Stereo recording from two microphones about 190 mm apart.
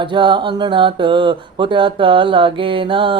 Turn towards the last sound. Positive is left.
turn(degrees=-25)  # may be behind; listen again after turning